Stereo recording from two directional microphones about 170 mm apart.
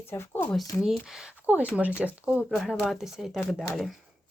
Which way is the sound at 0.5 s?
Centre (ahead or behind).